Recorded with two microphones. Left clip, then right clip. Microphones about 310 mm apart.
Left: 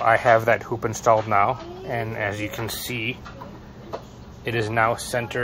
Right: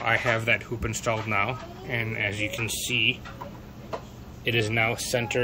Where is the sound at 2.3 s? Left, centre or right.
Left.